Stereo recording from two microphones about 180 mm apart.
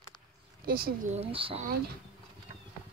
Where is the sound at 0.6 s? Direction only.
55° right (ahead or behind).